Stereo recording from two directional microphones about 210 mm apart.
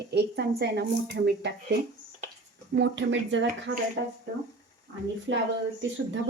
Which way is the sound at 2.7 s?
60° right (ahead or behind).